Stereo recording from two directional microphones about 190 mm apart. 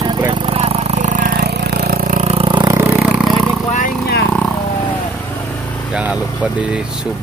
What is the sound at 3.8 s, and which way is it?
Vehicle, 55° left (ahead or behind).